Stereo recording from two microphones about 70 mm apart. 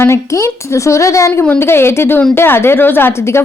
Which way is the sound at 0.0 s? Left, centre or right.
Left.